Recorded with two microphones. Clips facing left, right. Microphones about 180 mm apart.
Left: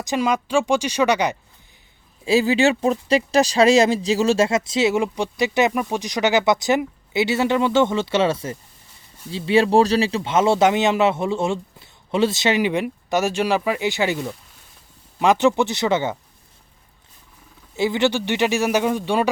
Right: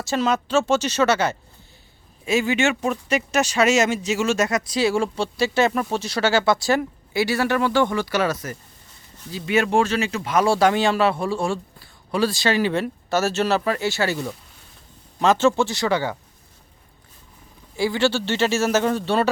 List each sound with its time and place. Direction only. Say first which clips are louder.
0.0 s speech: left 1 dB; 15° left (ahead or behind)
2.2 s a man's voice: left 4 dB; 35° left (ahead or behind)
17.7 s speech: left 1 dB; 20° left (ahead or behind)